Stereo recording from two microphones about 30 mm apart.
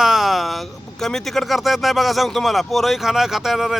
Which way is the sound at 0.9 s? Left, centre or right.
Centre.